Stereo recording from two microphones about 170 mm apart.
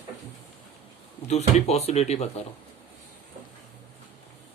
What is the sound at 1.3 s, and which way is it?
Speech, 40° left (ahead or behind).